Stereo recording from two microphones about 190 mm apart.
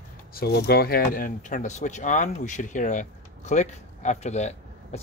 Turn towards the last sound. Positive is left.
turn(degrees=35)  # may be behind; listen again after turning